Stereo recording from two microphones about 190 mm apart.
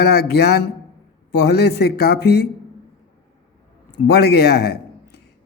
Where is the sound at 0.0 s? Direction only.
60° left (ahead or behind).